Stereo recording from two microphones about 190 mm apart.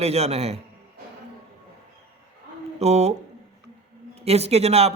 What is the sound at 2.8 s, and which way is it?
Speech, 35° right (ahead or behind).